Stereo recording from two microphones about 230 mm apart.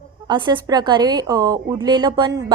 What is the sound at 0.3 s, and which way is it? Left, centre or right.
A woman's voice, right.